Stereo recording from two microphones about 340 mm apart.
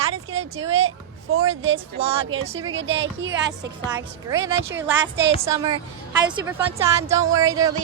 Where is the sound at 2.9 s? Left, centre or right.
Right.